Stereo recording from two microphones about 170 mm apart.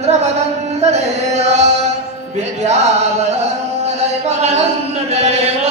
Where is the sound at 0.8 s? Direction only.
40° right (ahead or behind).